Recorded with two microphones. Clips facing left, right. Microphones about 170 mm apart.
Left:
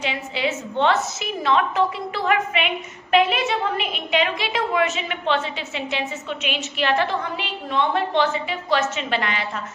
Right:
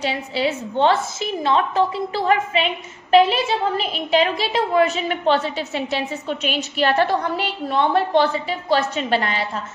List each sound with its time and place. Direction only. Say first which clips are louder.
0.0 s a woman's voice: right 3 dB; 35° right (ahead or behind)